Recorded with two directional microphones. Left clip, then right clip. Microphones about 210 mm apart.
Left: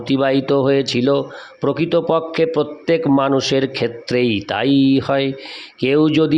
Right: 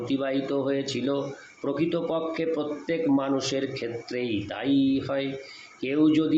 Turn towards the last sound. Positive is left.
turn(degrees=50)  # may be behind; listen again after turning